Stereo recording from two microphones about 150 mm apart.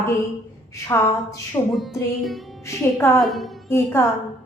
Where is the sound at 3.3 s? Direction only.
Centre (ahead or behind).